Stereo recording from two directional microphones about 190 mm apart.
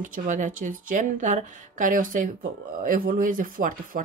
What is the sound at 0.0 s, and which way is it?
Speech, 40° right (ahead or behind).